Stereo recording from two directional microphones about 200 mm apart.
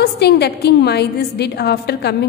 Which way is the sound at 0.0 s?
55° left (ahead or behind).